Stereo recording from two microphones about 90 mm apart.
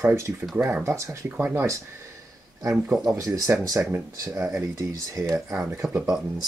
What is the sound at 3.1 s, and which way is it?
Speech, 35° right (ahead or behind).